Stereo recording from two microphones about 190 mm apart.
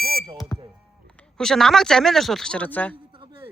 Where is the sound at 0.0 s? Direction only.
50° right (ahead or behind).